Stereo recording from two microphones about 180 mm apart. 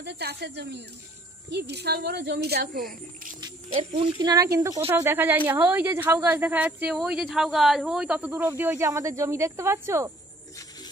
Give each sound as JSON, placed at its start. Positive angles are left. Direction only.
{"t": 0.0, "sound": "speech", "side_deg": -70}
{"t": 3.3, "sound": "speech", "side_deg": -25}